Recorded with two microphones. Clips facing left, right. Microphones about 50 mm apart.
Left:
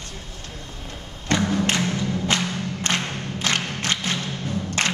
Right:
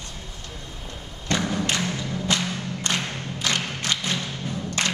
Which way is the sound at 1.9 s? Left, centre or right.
Left.